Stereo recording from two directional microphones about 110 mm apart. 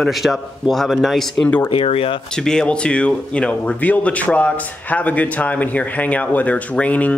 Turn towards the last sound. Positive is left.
turn(degrees=15)  # may be behind; listen again after turning